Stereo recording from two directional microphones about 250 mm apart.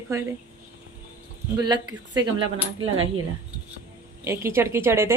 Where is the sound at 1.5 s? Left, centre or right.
Centre.